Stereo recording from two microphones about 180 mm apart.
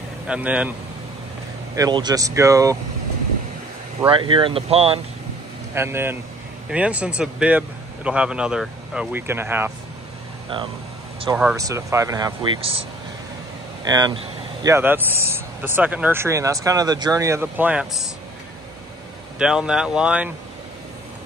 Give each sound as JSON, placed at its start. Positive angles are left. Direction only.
{"t": 0.3, "sound": "speech", "side_deg": -5}
{"t": 1.8, "sound": "speech", "side_deg": -25}
{"t": 4.1, "sound": "speech", "side_deg": -30}
{"t": 5.8, "sound": "speech", "side_deg": -15}
{"t": 11.5, "sound": "speech", "side_deg": -15}
{"t": 13.8, "sound": "speech", "side_deg": -20}
{"t": 19.3, "sound": "speech", "side_deg": -5}